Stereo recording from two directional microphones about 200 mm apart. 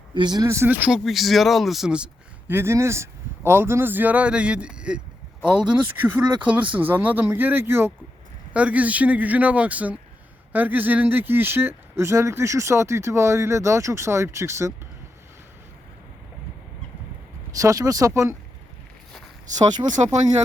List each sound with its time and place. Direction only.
0.1 s speech: 20° right (ahead or behind)
17.6 s speech: 15° right (ahead or behind)